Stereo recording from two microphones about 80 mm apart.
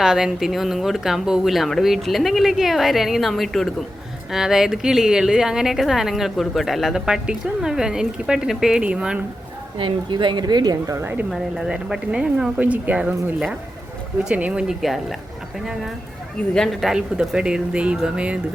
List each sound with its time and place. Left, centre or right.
0.0 s speech: centre
9.7 s speech: right
10.9 s a woman's voice: right
11.3 s speech: centre
14.3 s speech: centre
14.7 s speech: centre
16.4 s a woman's voice: centre
16.8 s speech: centre